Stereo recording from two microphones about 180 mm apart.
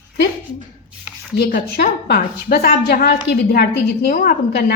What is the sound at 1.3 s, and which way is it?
A woman's voice, 60° left (ahead or behind).